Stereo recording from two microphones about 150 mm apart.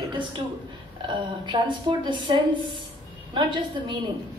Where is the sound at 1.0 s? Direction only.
30° right (ahead or behind).